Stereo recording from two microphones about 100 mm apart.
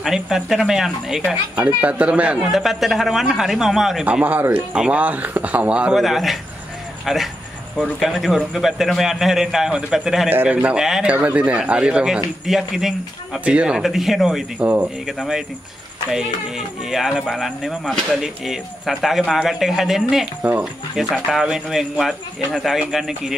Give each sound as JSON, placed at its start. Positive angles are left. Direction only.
{"t": 0.0, "sound": "speech", "side_deg": -5}
{"t": 1.3, "sound": "speech", "side_deg": -15}
{"t": 4.0, "sound": "speech", "side_deg": -15}
{"t": 10.3, "sound": "speech", "side_deg": -15}
{"t": 14.6, "sound": "speech", "side_deg": -15}
{"t": 15.0, "sound": "speech", "side_deg": -5}
{"t": 20.4, "sound": "speech", "side_deg": -15}
{"t": 21.0, "sound": "speech", "side_deg": 0}